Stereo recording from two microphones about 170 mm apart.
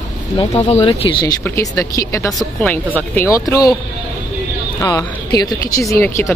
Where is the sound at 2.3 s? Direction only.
5° left (ahead or behind).